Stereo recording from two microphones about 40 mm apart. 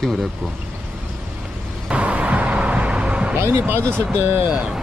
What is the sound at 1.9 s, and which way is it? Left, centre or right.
Vehicle, right.